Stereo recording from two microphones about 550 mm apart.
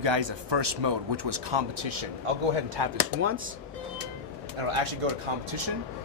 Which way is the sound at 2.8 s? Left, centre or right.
Right.